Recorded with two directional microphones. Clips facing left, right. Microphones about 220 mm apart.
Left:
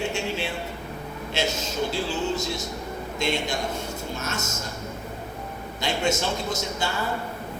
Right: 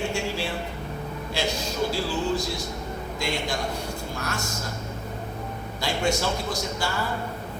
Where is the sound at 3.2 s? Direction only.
20° left (ahead or behind).